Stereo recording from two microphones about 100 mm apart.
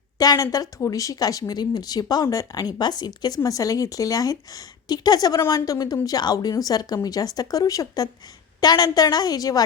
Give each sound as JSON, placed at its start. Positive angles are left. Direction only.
{"t": 0.2, "sound": "speech", "side_deg": 35}